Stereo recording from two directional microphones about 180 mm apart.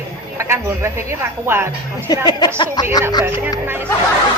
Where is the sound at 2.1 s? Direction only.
20° left (ahead or behind).